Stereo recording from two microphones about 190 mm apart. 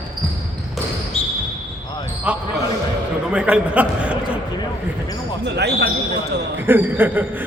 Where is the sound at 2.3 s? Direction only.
5° right (ahead or behind).